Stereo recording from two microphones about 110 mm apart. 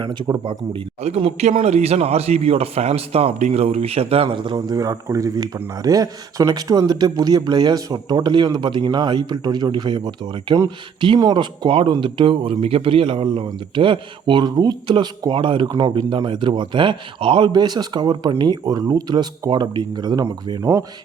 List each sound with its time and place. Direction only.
1.0 s a man's voice: 75° right (ahead or behind); by 20.8 s 30° right (ahead or behind)